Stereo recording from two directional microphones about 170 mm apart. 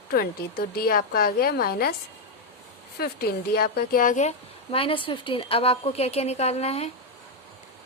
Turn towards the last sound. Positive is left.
turn(degrees=40)  # may be behind; listen again after turning